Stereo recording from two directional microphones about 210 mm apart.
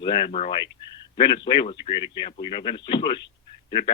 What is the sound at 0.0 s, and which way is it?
Speech, 20° left (ahead or behind).